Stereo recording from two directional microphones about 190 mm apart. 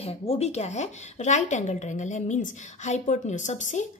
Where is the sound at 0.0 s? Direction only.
30° left (ahead or behind).